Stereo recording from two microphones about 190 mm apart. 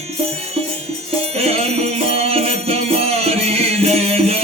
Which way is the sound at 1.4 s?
30° right (ahead or behind).